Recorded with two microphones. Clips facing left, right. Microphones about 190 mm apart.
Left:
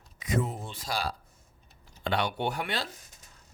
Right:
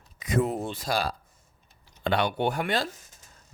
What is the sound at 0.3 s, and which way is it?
Speech, 65° right (ahead or behind).